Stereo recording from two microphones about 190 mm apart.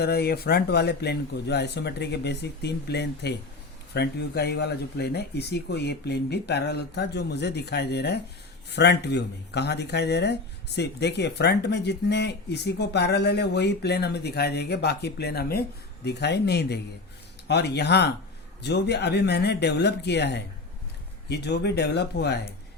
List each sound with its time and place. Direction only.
0.0 s speech: 55° left (ahead or behind)